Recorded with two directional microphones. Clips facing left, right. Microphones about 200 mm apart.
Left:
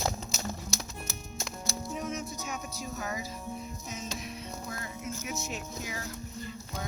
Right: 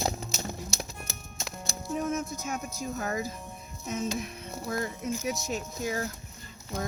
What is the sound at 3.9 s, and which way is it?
Speech, 55° right (ahead or behind).